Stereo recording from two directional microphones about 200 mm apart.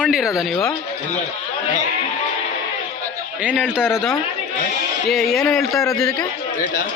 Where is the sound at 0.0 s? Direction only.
5° right (ahead or behind).